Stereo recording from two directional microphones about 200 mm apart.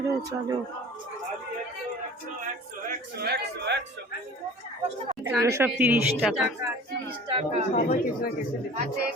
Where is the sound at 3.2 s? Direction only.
55° right (ahead or behind).